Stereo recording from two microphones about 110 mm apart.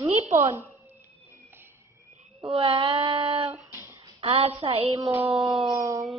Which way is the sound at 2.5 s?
55° right (ahead or behind).